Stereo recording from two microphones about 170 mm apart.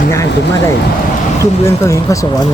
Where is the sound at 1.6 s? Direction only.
20° left (ahead or behind).